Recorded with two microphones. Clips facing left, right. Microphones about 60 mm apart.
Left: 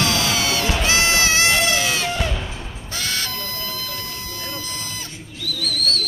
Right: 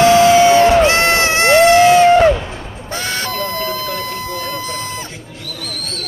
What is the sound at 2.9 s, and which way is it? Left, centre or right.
Buzzer, right.